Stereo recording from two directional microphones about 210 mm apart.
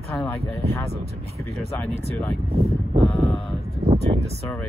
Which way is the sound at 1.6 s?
50° right (ahead or behind).